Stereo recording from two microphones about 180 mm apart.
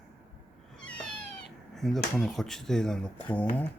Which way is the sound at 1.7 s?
Centre (ahead or behind).